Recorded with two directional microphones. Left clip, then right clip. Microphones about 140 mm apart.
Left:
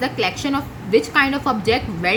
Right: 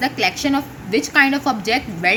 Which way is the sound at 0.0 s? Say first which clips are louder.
Right 2 dB; 35° right (ahead or behind).